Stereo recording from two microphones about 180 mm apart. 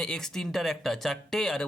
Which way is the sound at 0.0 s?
5° left (ahead or behind).